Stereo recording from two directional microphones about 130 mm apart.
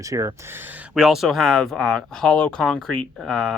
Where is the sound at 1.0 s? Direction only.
5° right (ahead or behind).